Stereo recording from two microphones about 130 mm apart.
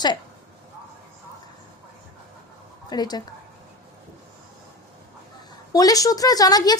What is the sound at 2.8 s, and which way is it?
Speech, 30° left (ahead or behind).